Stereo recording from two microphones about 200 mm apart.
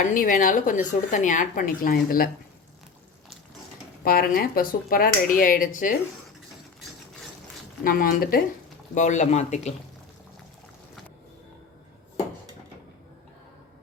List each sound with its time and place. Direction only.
0.0 s speech: 40° left (ahead or behind)
4.0 s speech: 45° left (ahead or behind)
7.9 s speech: 45° left (ahead or behind)